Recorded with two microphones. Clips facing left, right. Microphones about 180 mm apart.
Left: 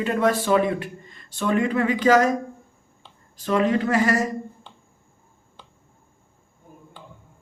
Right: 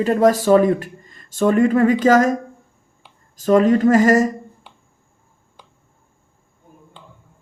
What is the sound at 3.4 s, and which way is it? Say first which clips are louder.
Speech: right 7 dB; 45° right (ahead or behind).